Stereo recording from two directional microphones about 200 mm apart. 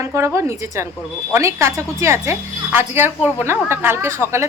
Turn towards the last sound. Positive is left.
turn(degrees=-15)  # may be behind; listen again after turning